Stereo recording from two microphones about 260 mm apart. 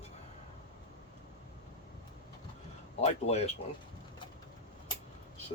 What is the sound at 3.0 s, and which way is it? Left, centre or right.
Speech, left.